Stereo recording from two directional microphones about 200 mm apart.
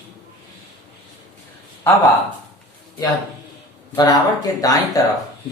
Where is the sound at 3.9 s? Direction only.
20° left (ahead or behind).